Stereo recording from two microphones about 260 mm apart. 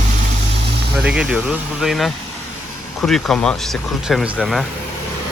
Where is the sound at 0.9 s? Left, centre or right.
Centre.